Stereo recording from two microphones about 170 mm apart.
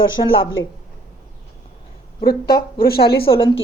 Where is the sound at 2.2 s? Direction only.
65° left (ahead or behind).